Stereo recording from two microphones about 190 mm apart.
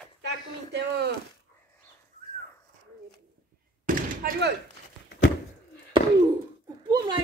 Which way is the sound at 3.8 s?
50° right (ahead or behind).